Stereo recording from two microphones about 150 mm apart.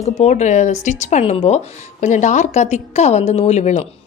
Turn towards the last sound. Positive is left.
turn(degrees=50)  # may be behind; listen again after turning